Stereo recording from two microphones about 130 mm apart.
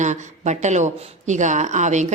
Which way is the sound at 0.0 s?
65° right (ahead or behind).